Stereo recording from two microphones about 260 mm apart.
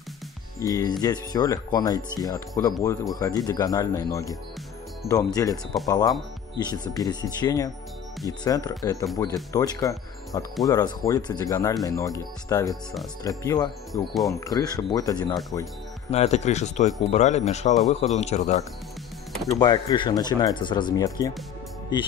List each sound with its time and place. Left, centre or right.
0.6 s speech: centre
19.6 s speech: centre